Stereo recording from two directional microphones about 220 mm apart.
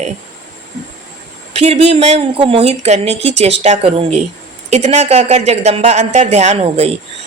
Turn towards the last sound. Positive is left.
turn(degrees=-25)  # may be behind; listen again after turning